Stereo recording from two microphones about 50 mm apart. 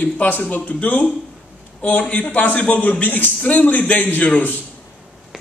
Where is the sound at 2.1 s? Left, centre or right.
Left.